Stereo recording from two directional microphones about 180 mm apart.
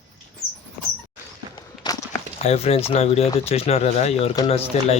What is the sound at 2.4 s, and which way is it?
Speech, 35° left (ahead or behind).